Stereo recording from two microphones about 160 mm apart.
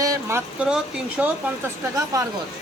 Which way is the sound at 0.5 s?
10° right (ahead or behind).